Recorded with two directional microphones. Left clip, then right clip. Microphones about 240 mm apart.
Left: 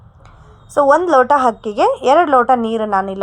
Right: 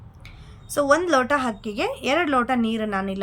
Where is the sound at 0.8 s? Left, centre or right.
Right.